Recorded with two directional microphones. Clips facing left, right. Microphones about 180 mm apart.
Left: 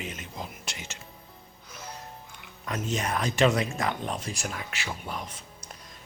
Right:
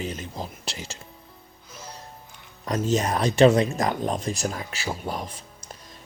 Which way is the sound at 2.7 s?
35° right (ahead or behind).